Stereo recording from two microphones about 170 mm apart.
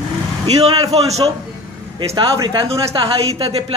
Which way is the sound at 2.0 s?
25° right (ahead or behind).